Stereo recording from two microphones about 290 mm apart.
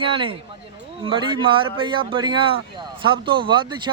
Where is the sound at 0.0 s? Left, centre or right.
Centre.